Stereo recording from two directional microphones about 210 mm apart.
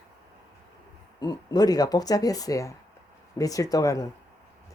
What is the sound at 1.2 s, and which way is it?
Speech, 20° left (ahead or behind).